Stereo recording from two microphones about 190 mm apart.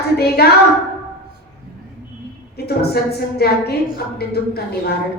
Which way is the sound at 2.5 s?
55° left (ahead or behind).